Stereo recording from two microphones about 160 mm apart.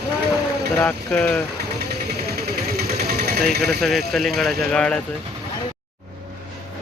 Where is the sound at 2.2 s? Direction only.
75° right (ahead or behind).